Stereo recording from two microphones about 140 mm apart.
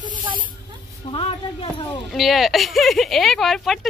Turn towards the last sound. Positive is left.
turn(degrees=0)  # may be behind; listen again after turning